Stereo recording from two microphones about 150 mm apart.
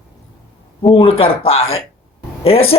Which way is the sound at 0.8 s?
40° left (ahead or behind).